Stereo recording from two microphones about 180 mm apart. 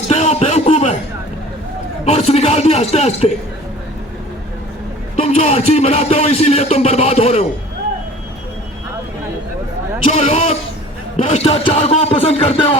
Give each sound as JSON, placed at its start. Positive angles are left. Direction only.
{"t": 0.1, "sound": "a sound", "side_deg": 35}
{"t": 2.0, "sound": "speech", "side_deg": 35}
{"t": 5.2, "sound": "speech", "side_deg": 35}
{"t": 10.1, "sound": "speech", "side_deg": 35}